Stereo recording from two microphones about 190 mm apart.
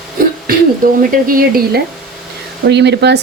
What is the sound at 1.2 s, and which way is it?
Speech, 50° right (ahead or behind).